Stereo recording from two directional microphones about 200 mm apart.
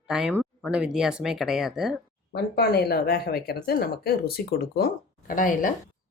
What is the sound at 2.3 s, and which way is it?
Speech, 50° left (ahead or behind).